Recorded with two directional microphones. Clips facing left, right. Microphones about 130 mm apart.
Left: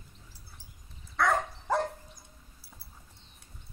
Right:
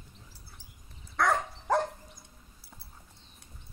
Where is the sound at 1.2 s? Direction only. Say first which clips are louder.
Even; centre (ahead or behind).